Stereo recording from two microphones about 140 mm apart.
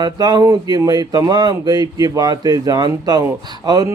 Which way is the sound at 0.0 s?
30° right (ahead or behind).